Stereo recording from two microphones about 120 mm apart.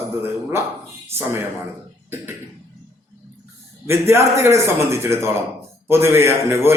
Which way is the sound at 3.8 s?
20° right (ahead or behind).